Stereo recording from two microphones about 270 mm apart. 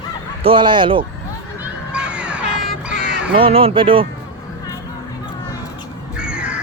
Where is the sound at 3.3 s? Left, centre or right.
Right.